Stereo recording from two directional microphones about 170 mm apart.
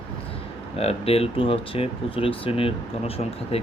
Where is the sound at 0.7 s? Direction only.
35° left (ahead or behind).